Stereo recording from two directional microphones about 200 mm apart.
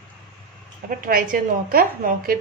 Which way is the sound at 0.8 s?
45° right (ahead or behind).